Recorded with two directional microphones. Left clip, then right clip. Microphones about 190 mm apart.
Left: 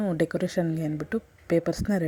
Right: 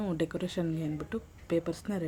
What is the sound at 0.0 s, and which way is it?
Speech, 25° left (ahead or behind).